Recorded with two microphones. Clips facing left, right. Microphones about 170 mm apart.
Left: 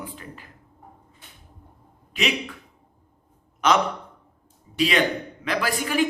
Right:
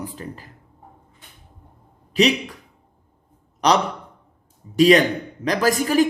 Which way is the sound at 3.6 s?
35° right (ahead or behind).